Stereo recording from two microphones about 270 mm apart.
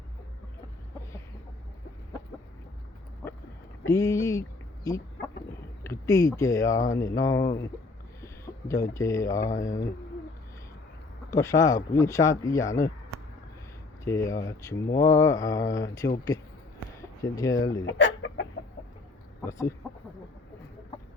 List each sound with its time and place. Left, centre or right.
3.2 s a sound: centre
5.8 s speech: centre
11.3 s speech: centre
14.0 s speech: centre
17.8 s chicken: left
19.4 s speech: centre